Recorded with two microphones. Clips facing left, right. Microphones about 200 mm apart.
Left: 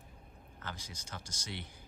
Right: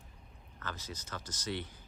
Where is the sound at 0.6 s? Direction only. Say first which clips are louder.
Right 3 dB; 15° left (ahead or behind).